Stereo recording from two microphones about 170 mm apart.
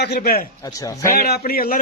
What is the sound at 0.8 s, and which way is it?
Speech, 20° left (ahead or behind).